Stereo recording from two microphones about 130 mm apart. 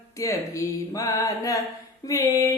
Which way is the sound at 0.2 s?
25° left (ahead or behind).